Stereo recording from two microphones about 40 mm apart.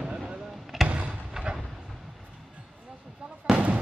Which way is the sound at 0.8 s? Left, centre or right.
Right.